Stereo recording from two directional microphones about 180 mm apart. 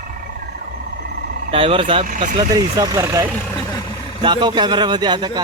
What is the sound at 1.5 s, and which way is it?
Speech, 30° right (ahead or behind).